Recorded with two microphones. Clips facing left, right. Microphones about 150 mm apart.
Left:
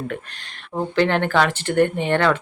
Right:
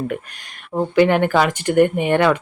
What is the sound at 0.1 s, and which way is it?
Speech, 10° right (ahead or behind).